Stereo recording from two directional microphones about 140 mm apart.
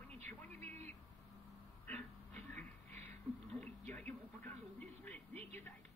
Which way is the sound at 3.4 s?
10° left (ahead or behind).